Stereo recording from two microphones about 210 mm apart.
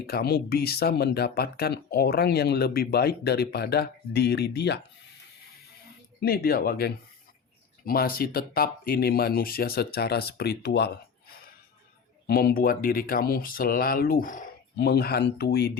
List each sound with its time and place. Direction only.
0.0 s speech: 50° left (ahead or behind)
6.2 s speech: 45° left (ahead or behind)